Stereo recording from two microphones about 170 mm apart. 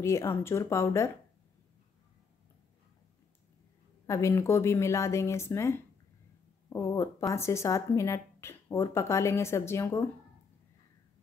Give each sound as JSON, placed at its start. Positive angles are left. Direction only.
{"t": 0.0, "sound": "speech", "side_deg": 15}
{"t": 4.0, "sound": "speech", "side_deg": 15}